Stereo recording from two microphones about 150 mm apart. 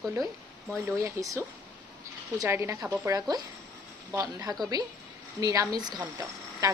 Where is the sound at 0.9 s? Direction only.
20° right (ahead or behind).